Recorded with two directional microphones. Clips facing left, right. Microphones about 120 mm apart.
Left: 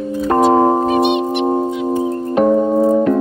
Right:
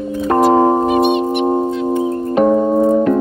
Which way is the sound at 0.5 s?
Centre (ahead or behind).